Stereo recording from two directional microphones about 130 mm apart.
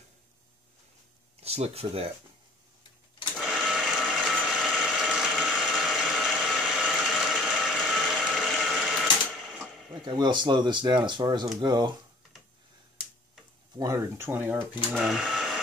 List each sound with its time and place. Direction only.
1.4 s speech: 55° right (ahead or behind)
3.3 s sewing machine: 5° right (ahead or behind)
10.0 s speech: 35° right (ahead or behind)
13.7 s speech: 25° right (ahead or behind)
15.0 s printer: centre (ahead or behind)